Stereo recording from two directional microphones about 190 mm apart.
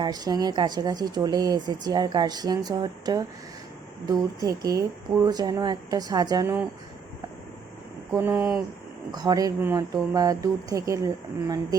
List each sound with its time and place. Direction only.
0.0 s speech: 20° right (ahead or behind)
8.1 s speech: 15° right (ahead or behind)